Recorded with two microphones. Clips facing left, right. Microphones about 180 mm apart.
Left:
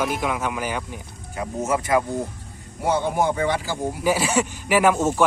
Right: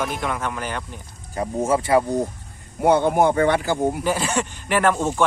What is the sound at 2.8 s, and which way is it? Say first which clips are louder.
Speech: right 5 dB; 55° right (ahead or behind).